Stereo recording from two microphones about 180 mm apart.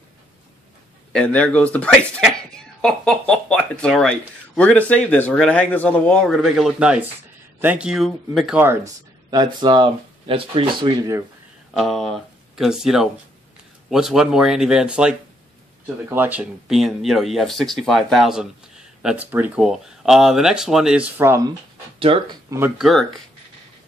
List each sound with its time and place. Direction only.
1.1 s speech: 5° left (ahead or behind); by 11.2 s 20° right (ahead or behind)
11.7 s speech: centre (ahead or behind); by 21.5 s 15° right (ahead or behind)
22.0 s speech: 30° right (ahead or behind)
22.8 s speech: centre (ahead or behind)